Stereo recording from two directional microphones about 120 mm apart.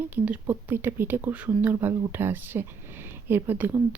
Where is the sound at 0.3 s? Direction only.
15° right (ahead or behind).